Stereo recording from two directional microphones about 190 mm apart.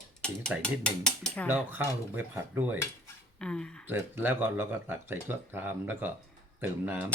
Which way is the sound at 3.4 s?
5° left (ahead or behind).